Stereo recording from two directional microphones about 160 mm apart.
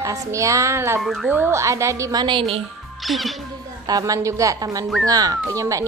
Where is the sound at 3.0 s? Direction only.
Centre (ahead or behind).